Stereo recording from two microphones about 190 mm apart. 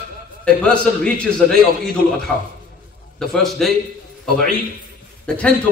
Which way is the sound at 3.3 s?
Centre (ahead or behind).